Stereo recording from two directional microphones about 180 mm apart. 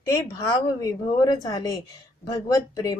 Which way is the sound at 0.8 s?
20° left (ahead or behind).